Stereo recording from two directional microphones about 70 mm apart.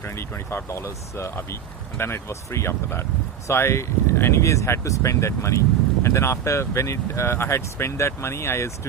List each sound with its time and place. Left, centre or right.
0.0 s speech: left